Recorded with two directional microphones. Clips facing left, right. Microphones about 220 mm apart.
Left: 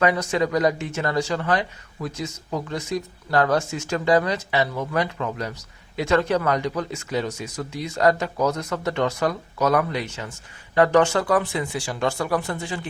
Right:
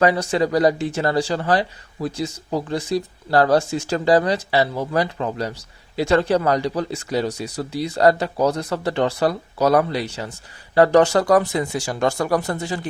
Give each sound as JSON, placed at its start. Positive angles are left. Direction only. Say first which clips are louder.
{"t": 0.0, "sound": "speech", "louder": "right 3 dB", "side_deg": -35}